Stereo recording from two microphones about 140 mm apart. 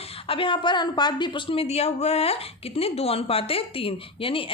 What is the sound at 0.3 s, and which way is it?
A woman's voice, 40° left (ahead or behind).